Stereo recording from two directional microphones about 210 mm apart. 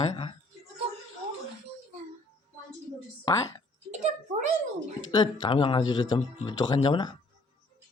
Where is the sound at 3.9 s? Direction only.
35° right (ahead or behind).